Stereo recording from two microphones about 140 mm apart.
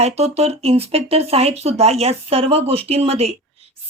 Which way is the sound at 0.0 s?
50° right (ahead or behind).